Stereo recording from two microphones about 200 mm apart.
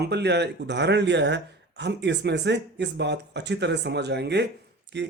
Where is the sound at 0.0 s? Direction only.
55° right (ahead or behind).